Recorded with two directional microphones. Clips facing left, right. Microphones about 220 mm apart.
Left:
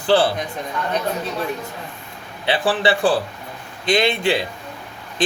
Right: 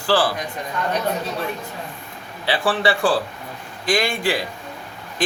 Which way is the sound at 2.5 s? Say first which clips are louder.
Left 1 dB; 20° left (ahead or behind).